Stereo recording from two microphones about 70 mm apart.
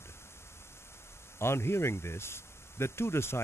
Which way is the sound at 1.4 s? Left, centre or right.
Left.